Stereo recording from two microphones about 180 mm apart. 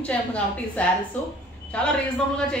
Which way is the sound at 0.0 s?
5° left (ahead or behind).